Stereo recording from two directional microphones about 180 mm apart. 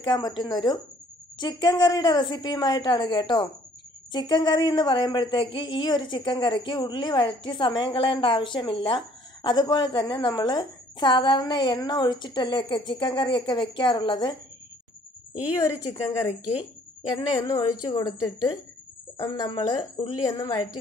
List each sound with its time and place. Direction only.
0.0 s speech: 25° left (ahead or behind)
15.5 s speech: 20° left (ahead or behind)
17.1 s a woman's voice: 15° left (ahead or behind)
19.1 s speech: 15° left (ahead or behind)